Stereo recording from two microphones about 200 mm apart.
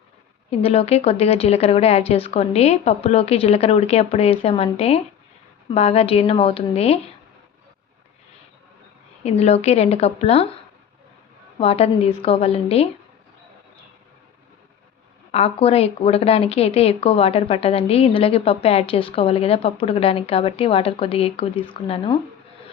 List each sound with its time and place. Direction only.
0.5 s speech: 30° left (ahead or behind)
9.2 s speech: 30° left (ahead or behind)
11.5 s a woman's voice: 30° left (ahead or behind)
15.3 s a woman's voice: 30° left (ahead or behind)